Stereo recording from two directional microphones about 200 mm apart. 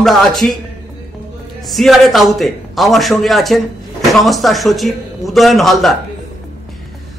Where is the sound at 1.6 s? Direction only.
Centre (ahead or behind).